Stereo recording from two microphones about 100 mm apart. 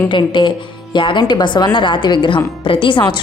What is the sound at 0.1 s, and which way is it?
A woman's voice, 55° left (ahead or behind).